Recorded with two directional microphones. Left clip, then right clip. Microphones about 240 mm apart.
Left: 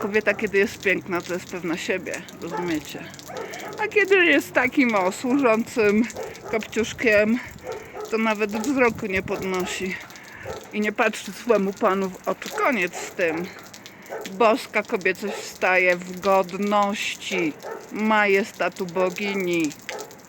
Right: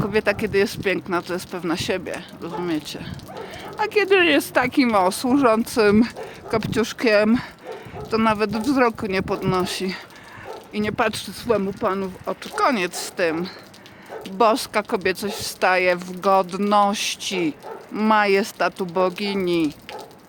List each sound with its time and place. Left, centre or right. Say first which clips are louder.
0.1 s speech: even; centre
10.8 s speech: even; centre
12.5 s speech: right 3 dB; centre